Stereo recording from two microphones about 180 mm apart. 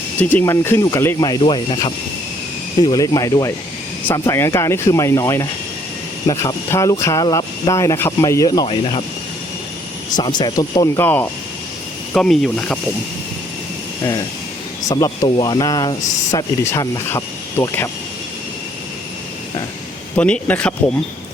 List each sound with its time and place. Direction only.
0.2 s speech: 10° left (ahead or behind); by 9.0 s 30° left (ahead or behind)
10.2 s speech: 25° left (ahead or behind)
11.0 s speech: 10° left (ahead or behind)
14.8 s speech: 20° left (ahead or behind)
20.1 s speech: 5° left (ahead or behind)